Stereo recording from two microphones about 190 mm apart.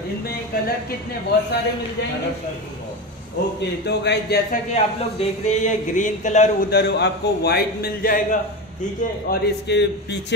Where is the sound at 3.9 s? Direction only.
60° left (ahead or behind).